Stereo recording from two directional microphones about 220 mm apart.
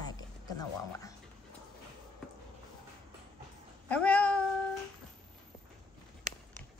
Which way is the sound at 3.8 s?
5° left (ahead or behind).